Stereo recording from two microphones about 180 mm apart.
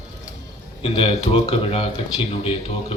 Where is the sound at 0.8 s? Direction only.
30° left (ahead or behind).